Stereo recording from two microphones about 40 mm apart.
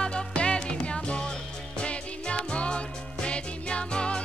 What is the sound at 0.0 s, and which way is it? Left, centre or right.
Music, left.